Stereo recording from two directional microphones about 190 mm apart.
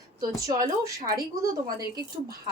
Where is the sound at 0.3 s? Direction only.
20° right (ahead or behind).